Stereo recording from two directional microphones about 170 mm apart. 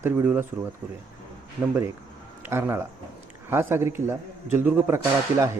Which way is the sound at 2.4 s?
15° right (ahead or behind).